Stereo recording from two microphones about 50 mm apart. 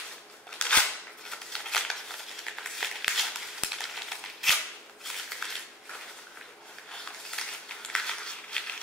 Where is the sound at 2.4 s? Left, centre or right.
Centre.